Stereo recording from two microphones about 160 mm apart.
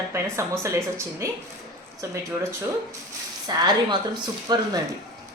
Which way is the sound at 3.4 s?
25° right (ahead or behind).